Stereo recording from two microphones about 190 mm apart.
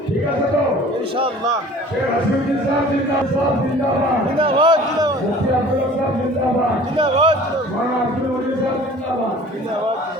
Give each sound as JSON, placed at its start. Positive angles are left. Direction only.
{"t": 4.4, "sound": "a man's voice", "side_deg": -25}
{"t": 6.9, "sound": "a man's voice", "side_deg": -25}